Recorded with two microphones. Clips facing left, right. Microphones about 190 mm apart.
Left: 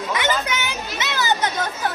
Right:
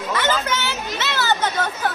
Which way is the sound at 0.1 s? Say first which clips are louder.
Right 2 dB; 15° left (ahead or behind).